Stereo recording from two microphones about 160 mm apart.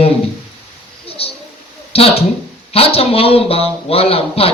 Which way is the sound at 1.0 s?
35° left (ahead or behind).